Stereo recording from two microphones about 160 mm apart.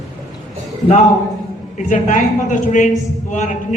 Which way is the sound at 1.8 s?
55° left (ahead or behind).